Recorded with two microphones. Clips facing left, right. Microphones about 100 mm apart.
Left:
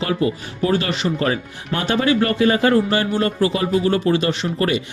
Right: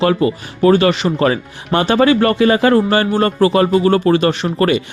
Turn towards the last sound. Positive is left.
turn(degrees=-70)  # may be behind; listen again after turning